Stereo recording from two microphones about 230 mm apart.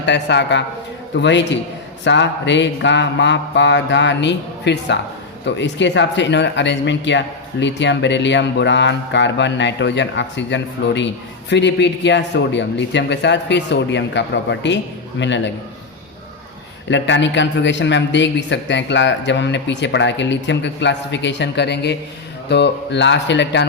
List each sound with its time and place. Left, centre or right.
0.0 s speech: left
16.9 s speech: left